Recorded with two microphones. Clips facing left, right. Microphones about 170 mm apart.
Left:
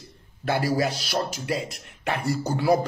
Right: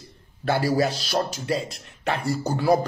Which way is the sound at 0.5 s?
25° right (ahead or behind).